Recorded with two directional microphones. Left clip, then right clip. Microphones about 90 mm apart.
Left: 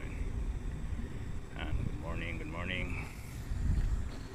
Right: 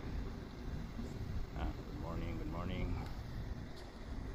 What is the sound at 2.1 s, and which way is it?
Speech, 5° left (ahead or behind).